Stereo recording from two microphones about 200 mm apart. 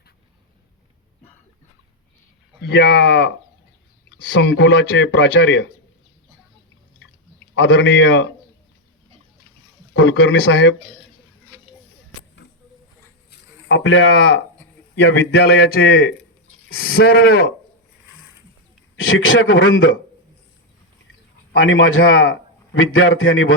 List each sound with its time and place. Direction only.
2.6 s speech: 65° left (ahead or behind)
7.5 s speech: 70° left (ahead or behind)
9.9 s speech: 75° left (ahead or behind)
13.7 s a man's voice: 65° left (ahead or behind); by 17.4 s 50° left (ahead or behind)
18.9 s a man's voice: 80° left
21.5 s a man's voice: 80° left